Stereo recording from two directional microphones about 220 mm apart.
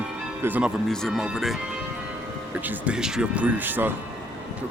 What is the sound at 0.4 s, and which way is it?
Speech, 5° right (ahead or behind).